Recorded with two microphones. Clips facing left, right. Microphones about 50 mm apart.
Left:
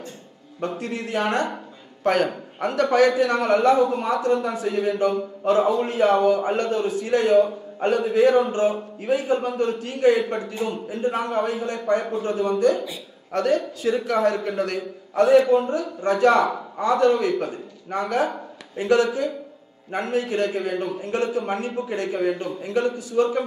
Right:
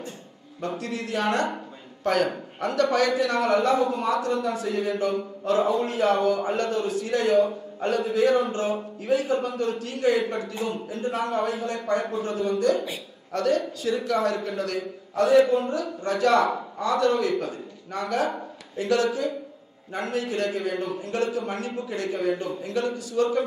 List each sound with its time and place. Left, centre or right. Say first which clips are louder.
0.6 s a man's voice: left 2 dB; left